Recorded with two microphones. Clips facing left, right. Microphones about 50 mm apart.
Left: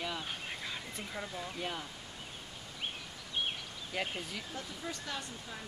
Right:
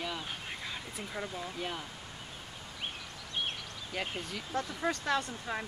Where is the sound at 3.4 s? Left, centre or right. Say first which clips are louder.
Right 1 dB; centre.